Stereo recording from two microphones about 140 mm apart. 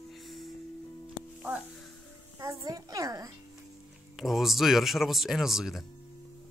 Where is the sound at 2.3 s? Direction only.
25° right (ahead or behind).